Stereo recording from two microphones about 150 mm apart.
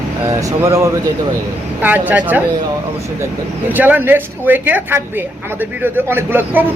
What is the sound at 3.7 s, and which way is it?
A woman's voice, 10° right (ahead or behind).